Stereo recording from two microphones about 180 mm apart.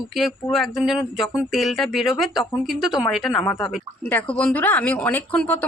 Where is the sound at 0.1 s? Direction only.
Centre (ahead or behind).